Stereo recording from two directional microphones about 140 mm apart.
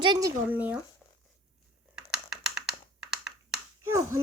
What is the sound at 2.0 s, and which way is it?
Computer keyboard, 5° right (ahead or behind).